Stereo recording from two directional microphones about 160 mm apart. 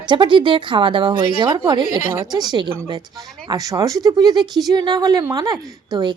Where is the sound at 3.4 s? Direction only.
20° right (ahead or behind).